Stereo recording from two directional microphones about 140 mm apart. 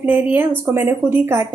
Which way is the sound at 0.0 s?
15° right (ahead or behind).